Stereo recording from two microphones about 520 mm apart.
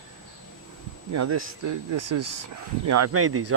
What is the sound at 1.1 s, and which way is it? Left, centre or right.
Speech, right.